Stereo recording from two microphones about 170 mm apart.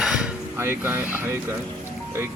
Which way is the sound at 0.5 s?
15° right (ahead or behind).